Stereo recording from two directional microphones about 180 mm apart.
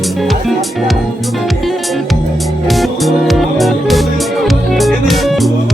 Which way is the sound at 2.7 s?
Centre (ahead or behind).